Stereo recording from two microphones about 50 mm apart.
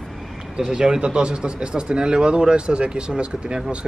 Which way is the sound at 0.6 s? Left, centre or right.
Centre.